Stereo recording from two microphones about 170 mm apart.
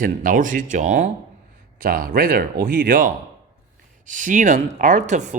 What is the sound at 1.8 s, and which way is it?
A man's voice, 60° right (ahead or behind).